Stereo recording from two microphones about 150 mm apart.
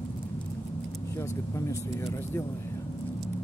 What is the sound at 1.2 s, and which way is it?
Speech, 20° left (ahead or behind).